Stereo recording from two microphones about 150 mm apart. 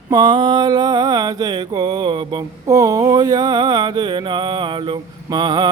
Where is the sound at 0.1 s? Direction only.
30° right (ahead or behind).